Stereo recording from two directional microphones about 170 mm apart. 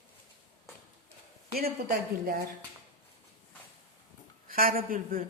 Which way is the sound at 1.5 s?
65° right (ahead or behind).